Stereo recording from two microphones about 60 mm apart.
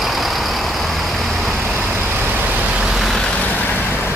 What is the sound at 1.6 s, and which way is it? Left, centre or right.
Vehicle, right.